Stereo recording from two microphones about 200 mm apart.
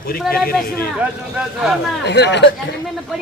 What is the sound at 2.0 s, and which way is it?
Speech, 60° left (ahead or behind).